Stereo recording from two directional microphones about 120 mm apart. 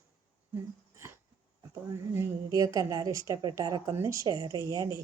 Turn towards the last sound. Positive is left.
turn(degrees=-30)  # may be behind; listen again after turning